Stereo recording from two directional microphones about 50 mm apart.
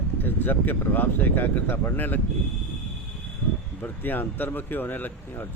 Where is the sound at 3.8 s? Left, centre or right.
Left.